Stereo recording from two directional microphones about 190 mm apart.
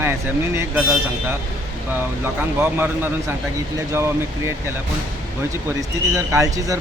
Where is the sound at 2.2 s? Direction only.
10° right (ahead or behind).